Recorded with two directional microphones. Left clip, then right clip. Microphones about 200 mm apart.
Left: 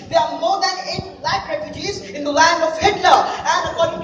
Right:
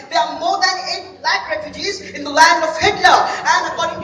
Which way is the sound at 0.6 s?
25° right (ahead or behind).